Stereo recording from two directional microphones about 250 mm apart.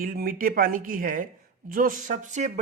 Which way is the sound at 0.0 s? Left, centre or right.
Right.